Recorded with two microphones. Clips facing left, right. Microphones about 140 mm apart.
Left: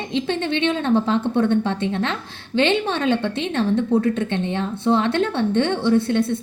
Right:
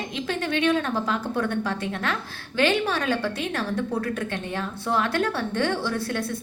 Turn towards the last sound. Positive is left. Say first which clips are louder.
# left 9 dB
turn(degrees=25)  # may be behind; listen again after turning